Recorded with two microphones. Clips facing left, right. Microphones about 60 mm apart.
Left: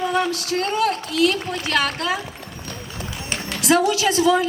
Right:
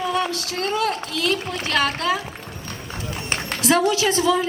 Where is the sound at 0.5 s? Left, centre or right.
Left.